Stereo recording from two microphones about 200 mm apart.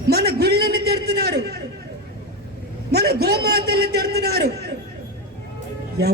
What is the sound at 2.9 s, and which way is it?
A man's voice, 55° right (ahead or behind).